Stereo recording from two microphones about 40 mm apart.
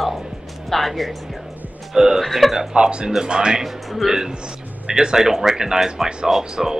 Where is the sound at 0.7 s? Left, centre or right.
Centre.